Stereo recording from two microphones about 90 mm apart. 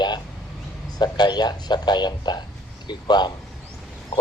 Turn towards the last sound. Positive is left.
turn(degrees=55)  # may be behind; listen again after turning